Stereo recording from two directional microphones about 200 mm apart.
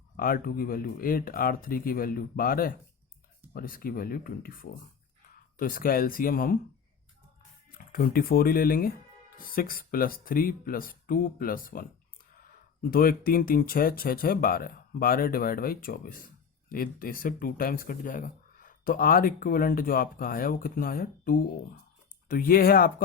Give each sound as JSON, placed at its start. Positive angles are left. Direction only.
{"t": 0.2, "sound": "speech", "side_deg": 45}
{"t": 7.7, "sound": "speech", "side_deg": 45}
{"t": 12.9, "sound": "speech", "side_deg": 45}